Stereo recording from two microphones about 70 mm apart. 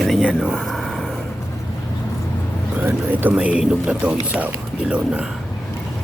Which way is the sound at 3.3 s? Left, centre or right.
Centre.